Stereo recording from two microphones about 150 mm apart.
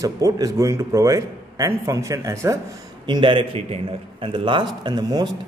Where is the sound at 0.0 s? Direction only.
20° right (ahead or behind).